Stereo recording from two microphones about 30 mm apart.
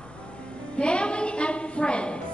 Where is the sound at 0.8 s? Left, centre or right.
Left.